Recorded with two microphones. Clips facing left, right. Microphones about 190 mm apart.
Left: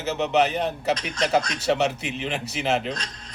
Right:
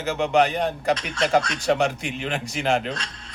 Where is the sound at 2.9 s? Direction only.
40° left (ahead or behind).